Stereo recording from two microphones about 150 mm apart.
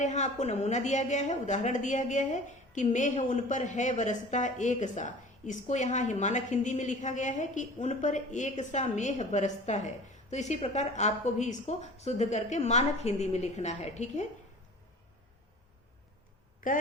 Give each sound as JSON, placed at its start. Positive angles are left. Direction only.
{"t": 0.0, "sound": "a woman's voice", "side_deg": 50}
{"t": 16.6, "sound": "a woman's voice", "side_deg": 65}